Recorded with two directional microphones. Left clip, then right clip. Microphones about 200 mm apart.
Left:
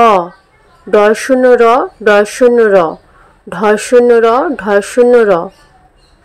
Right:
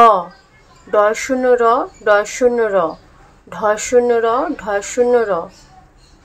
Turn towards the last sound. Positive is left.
turn(degrees=25)  # may be behind; listen again after turning